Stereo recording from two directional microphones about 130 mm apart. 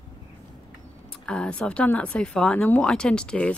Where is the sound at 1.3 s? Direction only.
5° left (ahead or behind).